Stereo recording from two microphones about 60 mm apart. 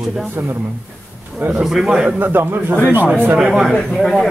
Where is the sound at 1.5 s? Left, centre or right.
Centre.